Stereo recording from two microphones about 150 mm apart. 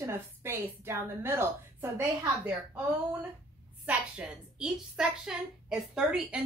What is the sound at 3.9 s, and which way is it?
A woman's voice, 5° right (ahead or behind).